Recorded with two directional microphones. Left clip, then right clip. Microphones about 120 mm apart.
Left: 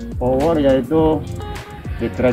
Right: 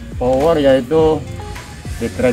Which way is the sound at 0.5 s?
35° right (ahead or behind).